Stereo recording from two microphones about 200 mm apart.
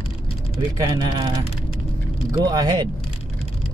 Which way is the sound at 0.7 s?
20° right (ahead or behind).